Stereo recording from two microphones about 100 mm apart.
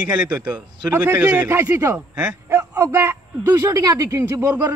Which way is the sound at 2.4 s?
30° right (ahead or behind).